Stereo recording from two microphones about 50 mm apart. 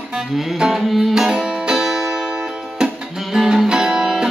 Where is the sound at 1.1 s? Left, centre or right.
Centre.